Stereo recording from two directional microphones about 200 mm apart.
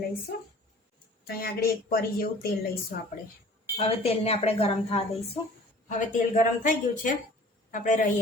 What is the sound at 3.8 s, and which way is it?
Speech, 30° left (ahead or behind).